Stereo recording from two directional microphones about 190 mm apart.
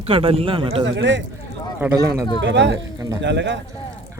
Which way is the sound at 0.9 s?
70° right (ahead or behind).